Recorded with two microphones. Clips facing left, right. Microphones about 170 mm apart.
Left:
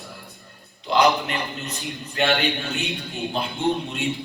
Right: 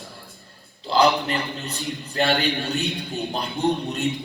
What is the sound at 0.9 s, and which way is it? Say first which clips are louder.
A man's voice: even; 30° right (ahead or behind).